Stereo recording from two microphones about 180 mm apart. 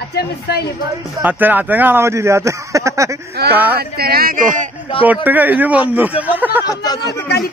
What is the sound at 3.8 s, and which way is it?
Speech, 60° right (ahead or behind).